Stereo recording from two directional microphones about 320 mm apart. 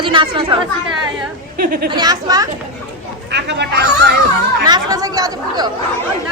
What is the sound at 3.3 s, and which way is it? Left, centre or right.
Speech, right.